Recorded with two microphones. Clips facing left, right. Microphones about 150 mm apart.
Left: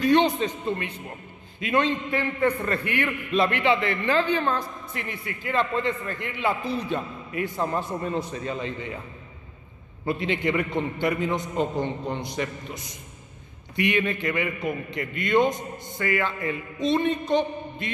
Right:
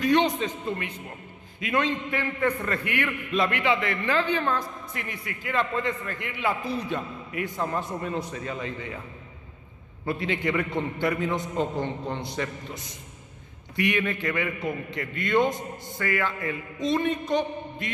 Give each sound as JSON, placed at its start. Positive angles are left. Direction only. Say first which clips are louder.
{"t": 0.0, "sound": "a man's voice", "louder": "left 2 dB", "side_deg": 30}
{"t": 10.0, "sound": "a man's voice", "louder": "left 2 dB", "side_deg": 20}